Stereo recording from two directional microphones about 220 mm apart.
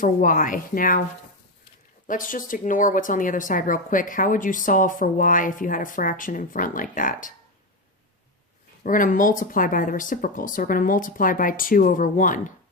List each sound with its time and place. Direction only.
0.0 s speech: 35° left (ahead or behind)
2.0 s speech: 35° left (ahead or behind)
8.8 s speech: 40° left (ahead or behind)